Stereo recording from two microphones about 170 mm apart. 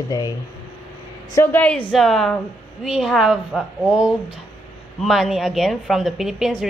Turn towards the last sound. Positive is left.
turn(degrees=0)  # may be behind; listen again after turning